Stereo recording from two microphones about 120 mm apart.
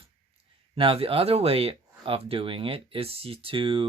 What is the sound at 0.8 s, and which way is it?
Speech, 50° right (ahead or behind).